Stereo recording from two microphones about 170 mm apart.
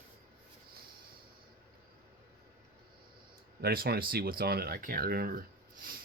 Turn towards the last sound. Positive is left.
turn(degrees=-55)  # may be behind; listen again after turning